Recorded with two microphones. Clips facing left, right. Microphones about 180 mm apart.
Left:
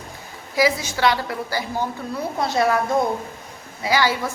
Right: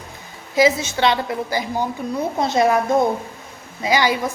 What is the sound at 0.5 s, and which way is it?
A woman's voice, 25° right (ahead or behind).